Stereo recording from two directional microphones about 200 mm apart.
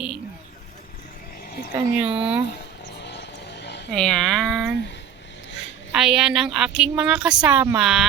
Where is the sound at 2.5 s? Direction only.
60° left (ahead or behind).